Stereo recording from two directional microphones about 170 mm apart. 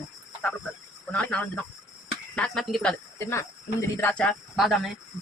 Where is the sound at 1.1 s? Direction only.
10° left (ahead or behind).